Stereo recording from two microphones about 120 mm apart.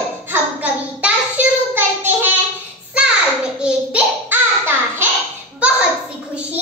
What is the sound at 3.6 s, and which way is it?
Child singing, 15° right (ahead or behind).